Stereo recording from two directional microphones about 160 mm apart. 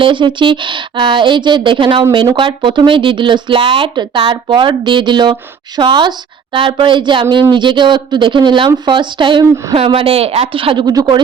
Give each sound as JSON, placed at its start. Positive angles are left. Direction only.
{"t": 0.0, "sound": "speech", "side_deg": -30}